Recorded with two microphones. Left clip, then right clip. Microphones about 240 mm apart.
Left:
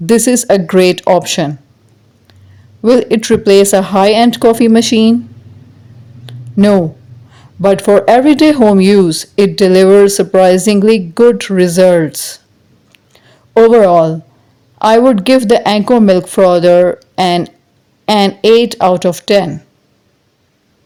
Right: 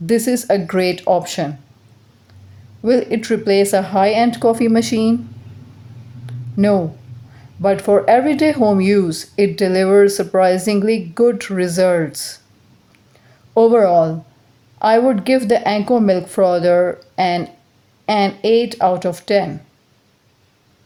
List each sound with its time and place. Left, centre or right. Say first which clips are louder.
0.0 s speech: left 7 dB; left
2.8 s speech: left 7 dB; left
6.2 s a sound: left 6 dB; left
7.3 s speech: left 6 dB; left
13.5 s speech: left 6 dB; left